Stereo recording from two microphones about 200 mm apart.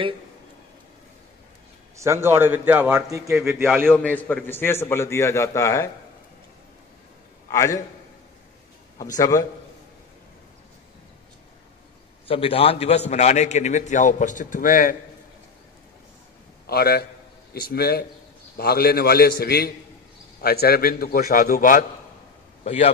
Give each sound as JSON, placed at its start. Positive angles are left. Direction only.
{"t": 2.0, "sound": "a man's voice", "side_deg": -15}
{"t": 3.8, "sound": "a man's voice", "side_deg": 5}
{"t": 7.5, "sound": "a man's voice", "side_deg": 15}
{"t": 9.0, "sound": "a man's voice", "side_deg": 15}
{"t": 12.3, "sound": "a man's voice", "side_deg": 30}
{"t": 16.6, "sound": "a man's voice", "side_deg": 50}